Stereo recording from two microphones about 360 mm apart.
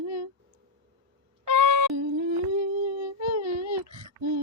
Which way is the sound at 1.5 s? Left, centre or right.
Right.